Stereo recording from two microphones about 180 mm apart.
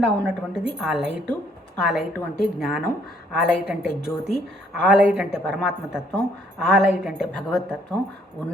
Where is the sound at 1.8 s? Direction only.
5° right (ahead or behind).